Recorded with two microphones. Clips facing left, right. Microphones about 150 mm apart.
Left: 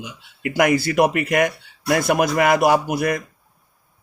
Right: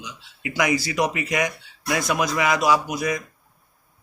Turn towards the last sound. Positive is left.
turn(degrees=60)  # may be behind; listen again after turning